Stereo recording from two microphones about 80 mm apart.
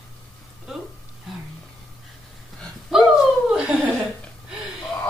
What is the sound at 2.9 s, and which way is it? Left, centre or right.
Dog, centre.